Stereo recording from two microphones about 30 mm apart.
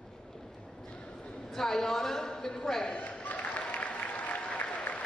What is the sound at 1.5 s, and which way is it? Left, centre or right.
A woman's voice, centre.